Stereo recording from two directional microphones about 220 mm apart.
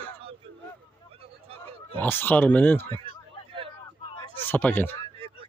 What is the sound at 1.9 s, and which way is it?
Speech, 10° left (ahead or behind).